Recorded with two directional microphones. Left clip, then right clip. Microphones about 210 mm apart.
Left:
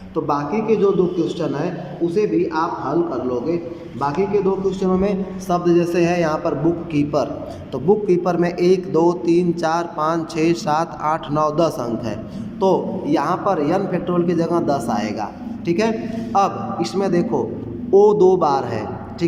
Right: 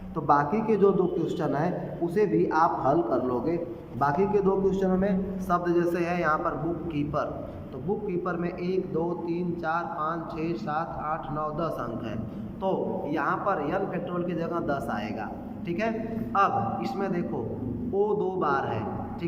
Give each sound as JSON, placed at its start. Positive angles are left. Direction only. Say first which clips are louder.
{"t": 0.3, "sound": "a man's voice", "louder": "left 3 dB", "side_deg": 0}
{"t": 8.0, "sound": "a man's voice", "louder": "left 12 dB", "side_deg": 30}